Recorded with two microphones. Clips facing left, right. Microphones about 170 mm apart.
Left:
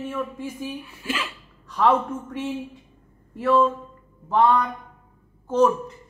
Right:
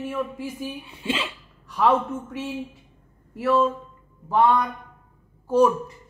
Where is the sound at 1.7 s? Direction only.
10° right (ahead or behind).